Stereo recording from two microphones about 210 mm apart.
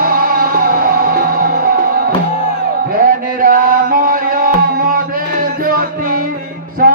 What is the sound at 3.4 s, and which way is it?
Mantra, 40° right (ahead or behind).